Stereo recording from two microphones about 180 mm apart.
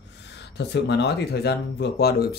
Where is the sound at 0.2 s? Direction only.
70° left (ahead or behind).